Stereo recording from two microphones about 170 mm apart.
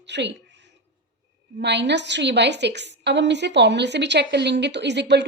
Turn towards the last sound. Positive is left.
turn(degrees=-90)